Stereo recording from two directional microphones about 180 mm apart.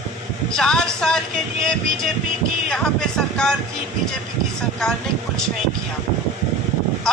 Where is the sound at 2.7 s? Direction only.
5° left (ahead or behind).